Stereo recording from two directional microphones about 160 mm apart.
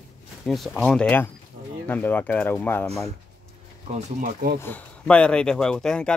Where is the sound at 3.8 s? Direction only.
55° right (ahead or behind).